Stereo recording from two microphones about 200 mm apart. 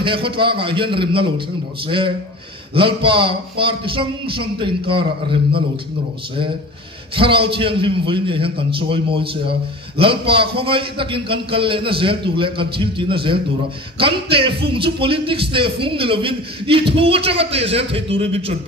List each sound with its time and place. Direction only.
0.0 s speech: 25° right (ahead or behind)
7.2 s speech: 25° right (ahead or behind)